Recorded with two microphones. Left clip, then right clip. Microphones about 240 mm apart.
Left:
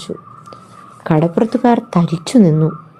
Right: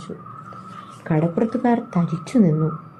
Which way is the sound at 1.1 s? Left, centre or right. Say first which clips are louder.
Left 7 dB; left.